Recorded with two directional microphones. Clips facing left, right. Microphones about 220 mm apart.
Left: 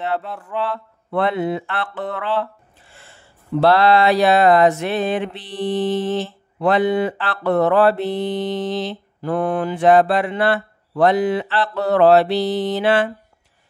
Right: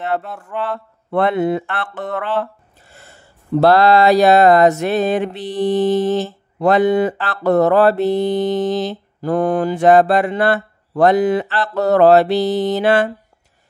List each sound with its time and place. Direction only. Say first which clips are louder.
0.6 s speech: right 1 dB; 50° right (ahead or behind)